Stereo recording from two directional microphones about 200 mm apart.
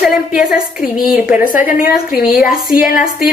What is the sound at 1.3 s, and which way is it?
A woman's voice, 40° left (ahead or behind).